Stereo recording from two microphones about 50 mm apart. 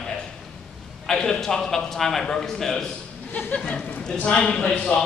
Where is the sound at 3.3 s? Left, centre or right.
Left.